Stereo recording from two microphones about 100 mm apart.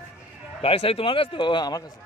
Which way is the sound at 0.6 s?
70° left (ahead or behind).